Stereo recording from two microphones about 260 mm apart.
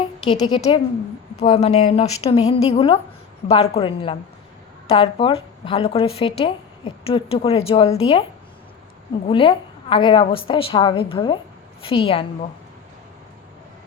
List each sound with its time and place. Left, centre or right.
0.3 s a woman's voice: centre
9.2 s a woman's voice: centre